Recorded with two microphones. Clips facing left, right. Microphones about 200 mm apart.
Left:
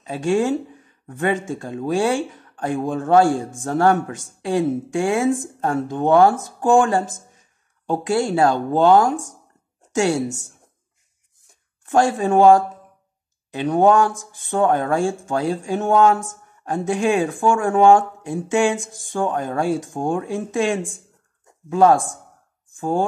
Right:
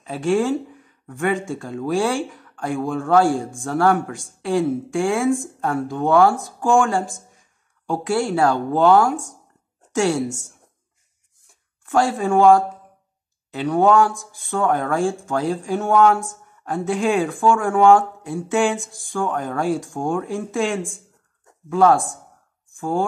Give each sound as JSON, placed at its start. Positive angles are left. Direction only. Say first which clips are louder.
{"t": 0.0, "sound": "speech", "louder": "even", "side_deg": 15}
{"t": 11.9, "sound": "speech", "louder": "left 1 dB", "side_deg": 20}